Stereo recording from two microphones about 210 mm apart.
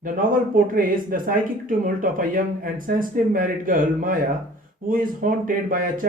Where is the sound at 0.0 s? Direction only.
40° right (ahead or behind).